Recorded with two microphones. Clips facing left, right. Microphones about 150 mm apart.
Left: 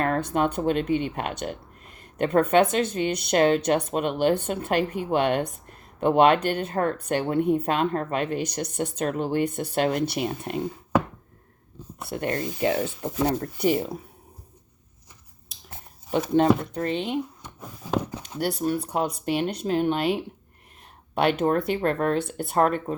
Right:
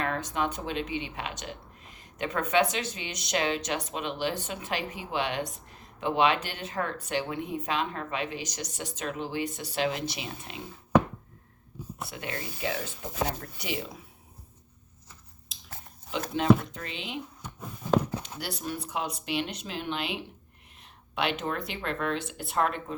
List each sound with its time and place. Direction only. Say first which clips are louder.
0.0 s speech: left 7 dB; 50° left (ahead or behind)
12.0 s speech: left 10 dB; 50° left (ahead or behind)
16.3 s speech: left 3 dB; 45° left (ahead or behind)
18.3 s speech: left 14 dB; 50° left (ahead or behind)
21.2 s speech: left 9 dB; 50° left (ahead or behind)